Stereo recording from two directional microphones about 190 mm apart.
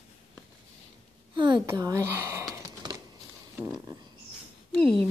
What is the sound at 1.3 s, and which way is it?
Speech, 25° right (ahead or behind).